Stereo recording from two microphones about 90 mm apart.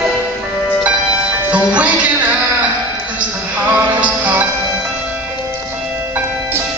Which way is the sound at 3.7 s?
20° right (ahead or behind).